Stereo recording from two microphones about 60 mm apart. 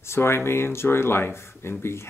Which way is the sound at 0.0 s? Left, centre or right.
Left.